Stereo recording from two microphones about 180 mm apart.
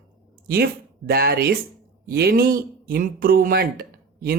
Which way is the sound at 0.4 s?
60° right (ahead or behind).